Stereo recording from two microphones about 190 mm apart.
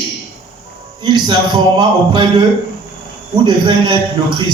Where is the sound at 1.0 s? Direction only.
25° right (ahead or behind).